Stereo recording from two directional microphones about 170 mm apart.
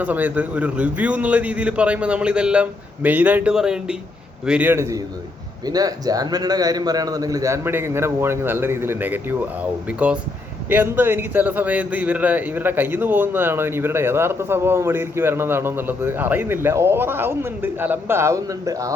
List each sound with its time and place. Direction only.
0.0 s a man's voice: 10° right (ahead or behind)